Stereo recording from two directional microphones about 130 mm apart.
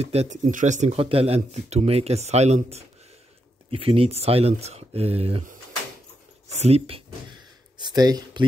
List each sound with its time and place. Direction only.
0.0 s speech: 55° right (ahead or behind)
0.5 s speech: 75° right (ahead or behind); by 2.8 s 55° right (ahead or behind)
3.7 s speech: 45° right (ahead or behind)
6.5 s speech: 55° right (ahead or behind)
7.2 s a sound: 35° right (ahead or behind)